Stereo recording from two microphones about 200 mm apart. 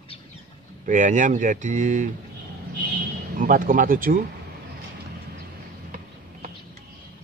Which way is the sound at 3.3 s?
45° right (ahead or behind).